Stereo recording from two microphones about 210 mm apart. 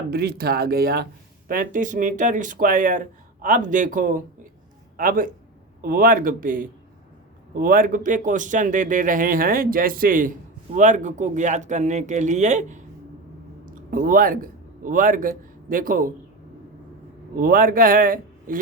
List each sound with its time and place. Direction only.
0.1 s a man's voice: 50° right (ahead or behind)
13.9 s a man's voice: 40° right (ahead or behind)
17.3 s a man's voice: 45° right (ahead or behind)